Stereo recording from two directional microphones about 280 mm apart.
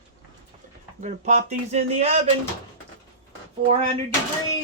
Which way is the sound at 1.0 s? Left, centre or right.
Right.